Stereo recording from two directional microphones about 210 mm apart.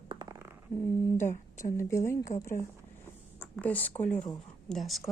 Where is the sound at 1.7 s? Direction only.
15° left (ahead or behind).